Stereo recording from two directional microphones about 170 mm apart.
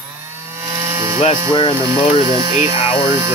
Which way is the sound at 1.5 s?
30° left (ahead or behind).